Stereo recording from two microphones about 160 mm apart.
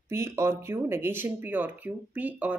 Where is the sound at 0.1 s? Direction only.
15° right (ahead or behind).